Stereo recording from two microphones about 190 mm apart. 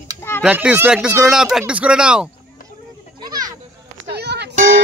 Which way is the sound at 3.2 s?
20° right (ahead or behind).